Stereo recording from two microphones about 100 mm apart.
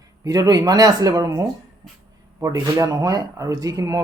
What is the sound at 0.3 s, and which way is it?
Speech, 40° right (ahead or behind).